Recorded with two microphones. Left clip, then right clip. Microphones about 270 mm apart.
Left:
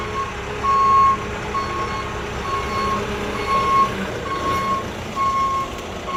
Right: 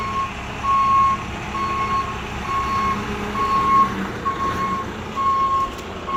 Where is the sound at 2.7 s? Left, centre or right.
Left.